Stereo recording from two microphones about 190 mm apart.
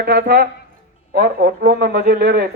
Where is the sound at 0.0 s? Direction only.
60° right (ahead or behind).